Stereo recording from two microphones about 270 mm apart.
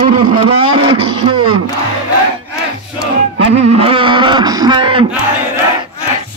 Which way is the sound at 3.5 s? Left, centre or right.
Right.